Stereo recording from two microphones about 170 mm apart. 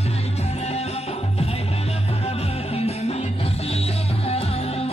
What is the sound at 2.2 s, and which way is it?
Music, 40° left (ahead or behind).